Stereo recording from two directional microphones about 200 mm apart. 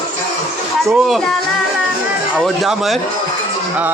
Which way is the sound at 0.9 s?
Centre (ahead or behind).